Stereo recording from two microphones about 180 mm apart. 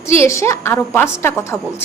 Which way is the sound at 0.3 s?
15° left (ahead or behind).